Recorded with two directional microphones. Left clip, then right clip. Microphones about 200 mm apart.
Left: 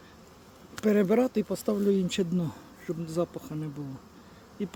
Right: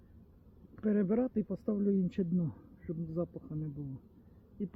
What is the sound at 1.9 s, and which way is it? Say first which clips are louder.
Speech: left 8 dB; 5° left (ahead or behind).